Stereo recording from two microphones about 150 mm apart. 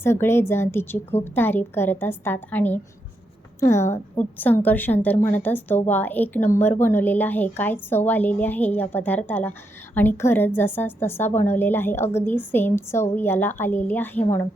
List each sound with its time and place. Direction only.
0.0 s a woman's voice: 15° left (ahead or behind)